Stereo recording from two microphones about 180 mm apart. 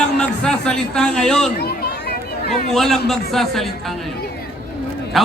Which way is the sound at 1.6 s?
65° left (ahead or behind).